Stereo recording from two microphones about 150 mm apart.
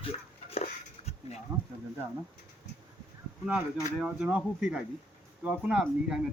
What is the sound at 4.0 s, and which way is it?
Speech, 5° right (ahead or behind).